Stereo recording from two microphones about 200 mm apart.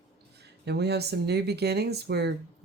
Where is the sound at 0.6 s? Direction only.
55° right (ahead or behind).